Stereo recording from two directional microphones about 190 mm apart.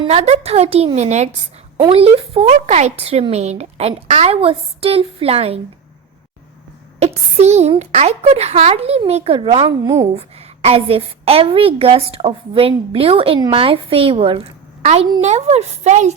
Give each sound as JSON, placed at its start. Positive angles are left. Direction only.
{"t": 0.0, "sound": "speech", "side_deg": -35}
{"t": 7.0, "sound": "a woman's voice", "side_deg": -35}